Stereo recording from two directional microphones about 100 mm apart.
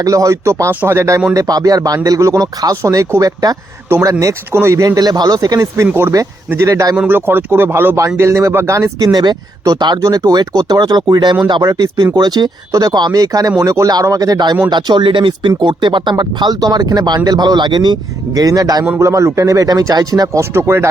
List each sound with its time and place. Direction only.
0.0 s speech: 30° right (ahead or behind)
6.9 s speech: 15° right (ahead or behind)
9.1 s speech: 45° right (ahead or behind)
11.7 s speech: 35° right (ahead or behind)